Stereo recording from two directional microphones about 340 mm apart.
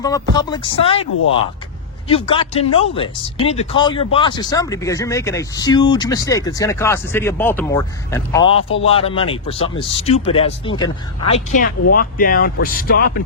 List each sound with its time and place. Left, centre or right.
0.0 s speech: centre
2.0 s speech: centre